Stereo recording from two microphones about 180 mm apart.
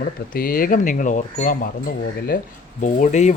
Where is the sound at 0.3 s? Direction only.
55° left (ahead or behind).